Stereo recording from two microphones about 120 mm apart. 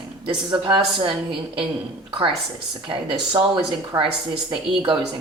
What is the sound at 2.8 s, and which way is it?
A woman's voice, 40° right (ahead or behind).